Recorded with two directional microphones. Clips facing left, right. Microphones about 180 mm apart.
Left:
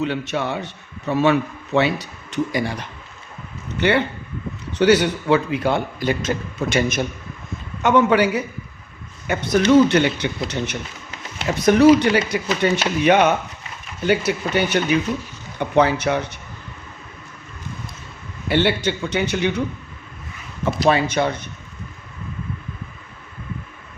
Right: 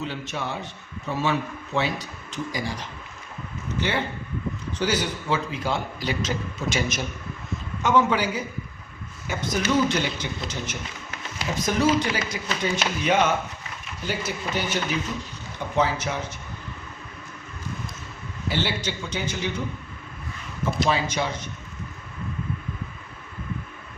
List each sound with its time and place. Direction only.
0.0 s a man's voice: 65° left (ahead or behind)
18.4 s a man's voice: 60° left (ahead or behind)
20.7 s a man's voice: 60° left (ahead or behind)